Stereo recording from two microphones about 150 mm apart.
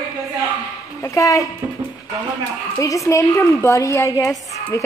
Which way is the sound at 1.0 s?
20° left (ahead or behind).